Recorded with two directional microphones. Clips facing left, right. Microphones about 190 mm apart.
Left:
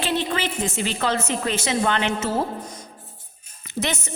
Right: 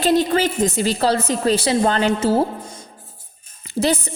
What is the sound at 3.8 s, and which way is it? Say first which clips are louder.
Speech: right 7 dB; 35° right (ahead or behind).